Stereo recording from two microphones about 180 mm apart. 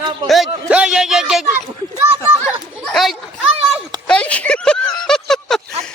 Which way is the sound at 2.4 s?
5° left (ahead or behind).